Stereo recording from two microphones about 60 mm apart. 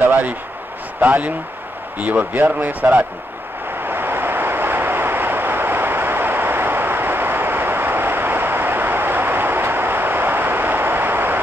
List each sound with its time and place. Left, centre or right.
1.0 s speech: right
3.8 s vehicle: right